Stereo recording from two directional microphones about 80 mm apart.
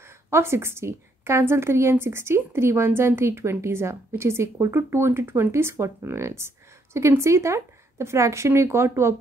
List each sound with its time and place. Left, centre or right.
0.3 s a woman's voice: right